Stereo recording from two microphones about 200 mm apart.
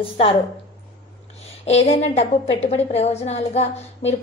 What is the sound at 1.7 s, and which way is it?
A woman's voice, 35° left (ahead or behind).